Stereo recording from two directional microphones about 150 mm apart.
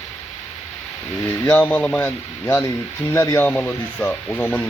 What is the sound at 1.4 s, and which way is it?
Speech, 10° left (ahead or behind).